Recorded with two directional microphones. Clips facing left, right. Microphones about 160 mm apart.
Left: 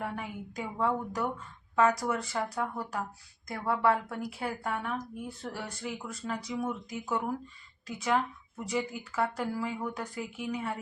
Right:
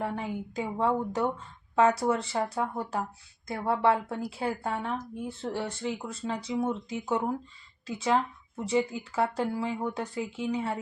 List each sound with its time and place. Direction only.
0.0 s speech: 30° right (ahead or behind)